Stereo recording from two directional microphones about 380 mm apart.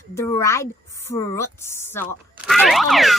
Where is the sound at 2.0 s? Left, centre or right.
Centre.